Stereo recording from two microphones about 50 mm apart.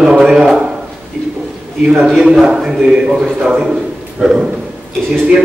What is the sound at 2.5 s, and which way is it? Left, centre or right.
A man's voice, centre.